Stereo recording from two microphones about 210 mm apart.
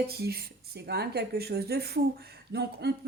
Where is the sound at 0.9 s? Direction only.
50° right (ahead or behind).